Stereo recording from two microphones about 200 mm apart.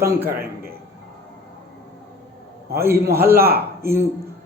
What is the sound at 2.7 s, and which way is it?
Speech, 15° right (ahead or behind).